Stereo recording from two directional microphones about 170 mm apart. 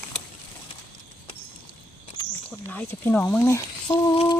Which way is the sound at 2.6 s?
10° left (ahead or behind).